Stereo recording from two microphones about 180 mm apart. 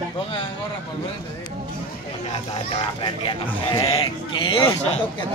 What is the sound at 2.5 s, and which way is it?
Speech, 35° left (ahead or behind).